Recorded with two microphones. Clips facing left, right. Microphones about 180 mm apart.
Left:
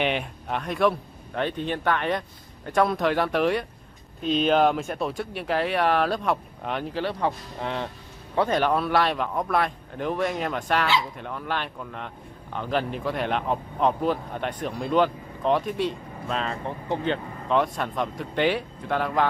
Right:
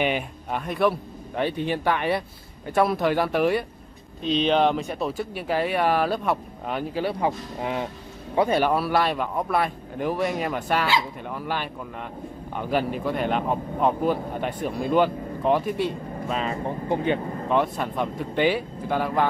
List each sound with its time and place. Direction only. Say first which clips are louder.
0.0 s speech: right 1 dB; 5° right (ahead or behind)